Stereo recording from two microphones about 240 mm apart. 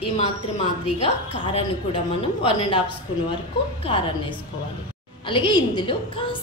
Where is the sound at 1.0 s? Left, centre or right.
Left.